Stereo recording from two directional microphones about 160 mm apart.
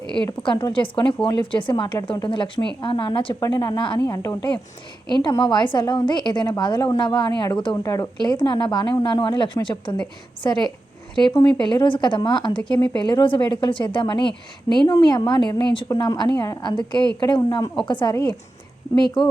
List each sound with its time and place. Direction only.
0.2 s a woman's voice: 30° left (ahead or behind)
19.2 s speech: centre (ahead or behind)